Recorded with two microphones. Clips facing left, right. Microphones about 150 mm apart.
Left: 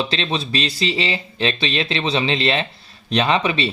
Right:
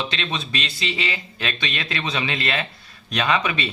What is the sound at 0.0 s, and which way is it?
Speech, 30° left (ahead or behind).